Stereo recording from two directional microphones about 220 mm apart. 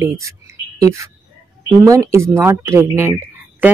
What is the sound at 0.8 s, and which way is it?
Speech, 15° right (ahead or behind).